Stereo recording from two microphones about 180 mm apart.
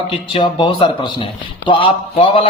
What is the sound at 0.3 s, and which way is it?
A man's voice, 25° left (ahead or behind).